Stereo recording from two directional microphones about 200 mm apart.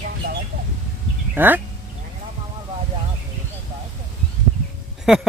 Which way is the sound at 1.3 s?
10° right (ahead or behind).